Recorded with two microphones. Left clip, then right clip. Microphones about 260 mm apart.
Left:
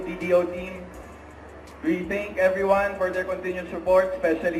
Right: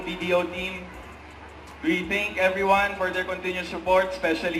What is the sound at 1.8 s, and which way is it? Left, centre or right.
A man's voice, centre.